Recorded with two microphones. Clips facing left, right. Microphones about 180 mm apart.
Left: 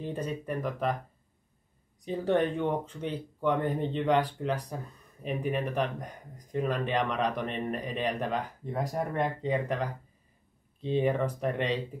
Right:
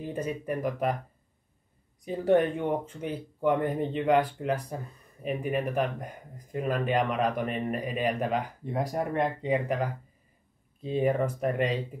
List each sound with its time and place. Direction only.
0.0 s speech: 5° right (ahead or behind)
2.0 s speech: 10° right (ahead or behind)